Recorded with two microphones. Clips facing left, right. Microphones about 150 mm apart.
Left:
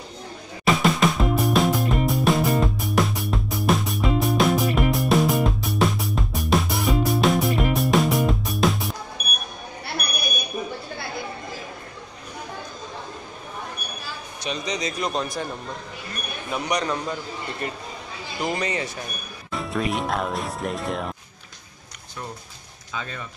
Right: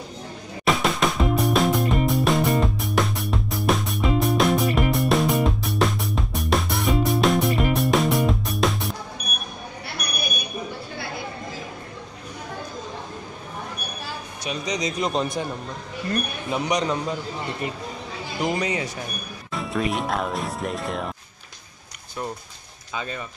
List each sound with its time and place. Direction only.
0.7 s music: centre (ahead or behind)
14.4 s speech: 10° right (ahead or behind)
16.4 s speech: 20° right (ahead or behind)
18.4 s speech: 10° right (ahead or behind)
19.5 s speech: centre (ahead or behind)
22.9 s speech: 10° right (ahead or behind)